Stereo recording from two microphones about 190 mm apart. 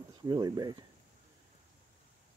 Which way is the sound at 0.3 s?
20° right (ahead or behind).